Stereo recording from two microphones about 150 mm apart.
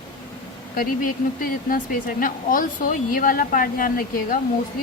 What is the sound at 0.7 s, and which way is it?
Speech, 70° left (ahead or behind).